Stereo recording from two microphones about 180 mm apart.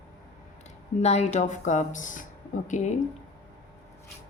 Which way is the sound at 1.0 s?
40° left (ahead or behind).